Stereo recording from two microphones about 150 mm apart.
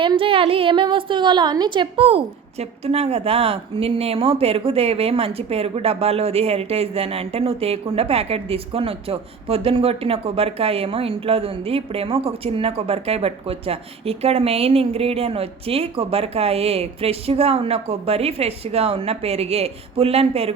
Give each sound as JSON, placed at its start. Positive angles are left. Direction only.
{"t": 0.0, "sound": "a woman's voice", "side_deg": -35}